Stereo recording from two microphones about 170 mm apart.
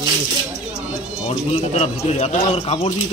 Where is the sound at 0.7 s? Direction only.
5° right (ahead or behind).